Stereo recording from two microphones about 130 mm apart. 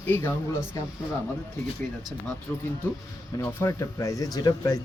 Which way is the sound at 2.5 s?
20° left (ahead or behind).